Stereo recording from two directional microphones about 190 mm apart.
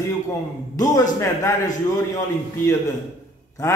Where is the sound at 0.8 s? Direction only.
15° left (ahead or behind).